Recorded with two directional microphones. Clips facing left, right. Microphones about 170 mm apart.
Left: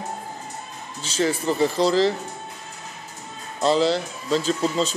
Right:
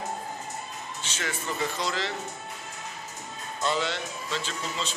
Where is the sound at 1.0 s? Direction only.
35° left (ahead or behind).